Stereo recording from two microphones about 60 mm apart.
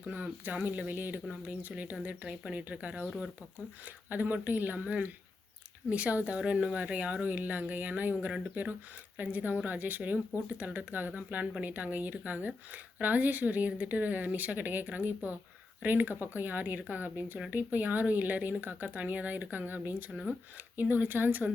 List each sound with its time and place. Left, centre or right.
0.0 s speech: right